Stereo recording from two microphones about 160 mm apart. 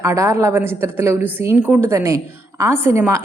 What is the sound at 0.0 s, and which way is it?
A woman's voice, 15° right (ahead or behind).